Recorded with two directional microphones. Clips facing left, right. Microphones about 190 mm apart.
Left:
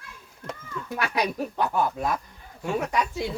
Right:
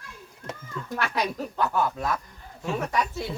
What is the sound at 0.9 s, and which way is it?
Speech, 10° left (ahead or behind).